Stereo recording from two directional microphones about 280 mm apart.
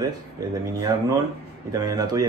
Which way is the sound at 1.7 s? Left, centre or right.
Centre.